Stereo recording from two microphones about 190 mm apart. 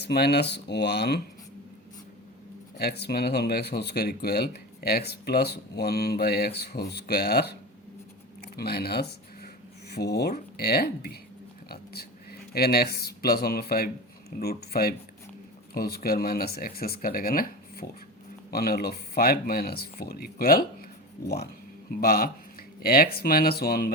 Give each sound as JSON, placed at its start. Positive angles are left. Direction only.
{"t": 0.0, "sound": "speech", "side_deg": 60}
{"t": 2.7, "sound": "speech", "side_deg": 60}
{"t": 8.4, "sound": "a sound", "side_deg": 55}
{"t": 9.9, "sound": "speech", "side_deg": 55}